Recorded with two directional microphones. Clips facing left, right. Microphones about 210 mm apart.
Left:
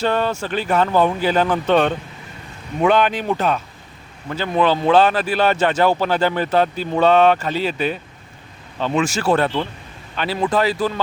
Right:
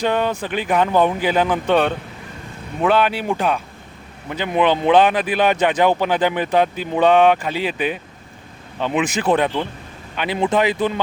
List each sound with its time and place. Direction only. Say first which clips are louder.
0.0 s speech: even; 15° right (ahead or behind)